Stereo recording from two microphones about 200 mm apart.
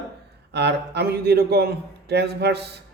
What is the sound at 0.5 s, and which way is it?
A man's voice, 55° right (ahead or behind).